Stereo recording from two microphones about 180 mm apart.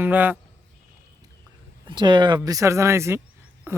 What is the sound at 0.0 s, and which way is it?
Speech, 10° right (ahead or behind).